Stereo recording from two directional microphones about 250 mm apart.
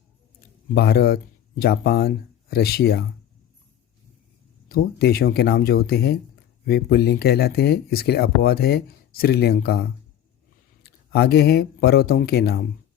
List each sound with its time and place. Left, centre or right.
0.7 s speech: left
4.7 s speech: left
10.8 s speech: left